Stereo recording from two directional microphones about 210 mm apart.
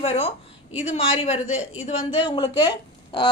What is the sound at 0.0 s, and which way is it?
A woman's voice, 30° left (ahead or behind).